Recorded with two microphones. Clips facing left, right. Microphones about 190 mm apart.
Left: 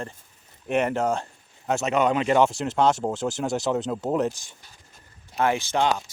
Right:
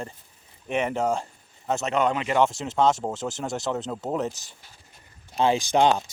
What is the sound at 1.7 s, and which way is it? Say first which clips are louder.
Speech: left 2 dB; 10° left (ahead or behind).